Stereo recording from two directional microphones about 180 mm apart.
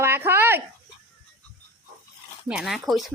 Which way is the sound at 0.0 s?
15° right (ahead or behind).